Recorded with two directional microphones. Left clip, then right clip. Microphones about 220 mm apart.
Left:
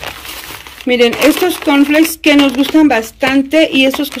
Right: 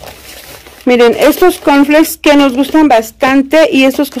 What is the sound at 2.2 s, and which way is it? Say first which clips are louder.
A woman's voice: right 2 dB; 10° right (ahead or behind).